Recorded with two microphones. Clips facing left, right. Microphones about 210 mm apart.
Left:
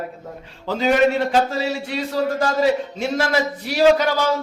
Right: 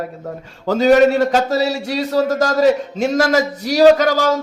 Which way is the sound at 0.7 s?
40° right (ahead or behind).